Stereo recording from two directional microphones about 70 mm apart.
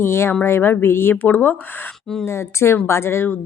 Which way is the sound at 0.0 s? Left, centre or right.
Left.